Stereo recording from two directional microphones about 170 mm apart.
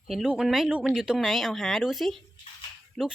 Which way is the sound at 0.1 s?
Centre (ahead or behind).